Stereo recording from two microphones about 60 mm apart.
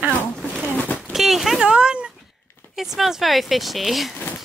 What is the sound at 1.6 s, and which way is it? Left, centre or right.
Speech, centre.